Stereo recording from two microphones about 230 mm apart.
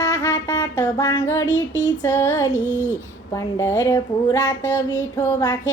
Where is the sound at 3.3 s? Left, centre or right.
Centre.